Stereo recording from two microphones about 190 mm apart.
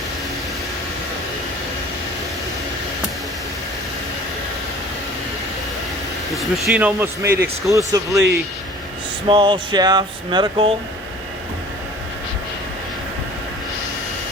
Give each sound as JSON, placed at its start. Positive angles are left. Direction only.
{"t": 6.3, "sound": "speech", "side_deg": -5}
{"t": 9.2, "sound": "speech", "side_deg": -25}